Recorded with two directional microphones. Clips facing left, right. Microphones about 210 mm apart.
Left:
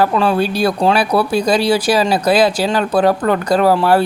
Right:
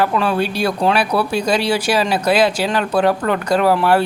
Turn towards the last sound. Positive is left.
turn(degrees=40)  # may be behind; listen again after turning